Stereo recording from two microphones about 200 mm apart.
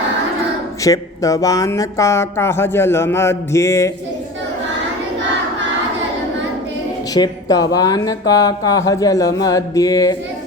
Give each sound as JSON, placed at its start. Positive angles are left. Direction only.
{"t": 0.9, "sound": "speech", "side_deg": 15}
{"t": 7.1, "sound": "speech", "side_deg": 20}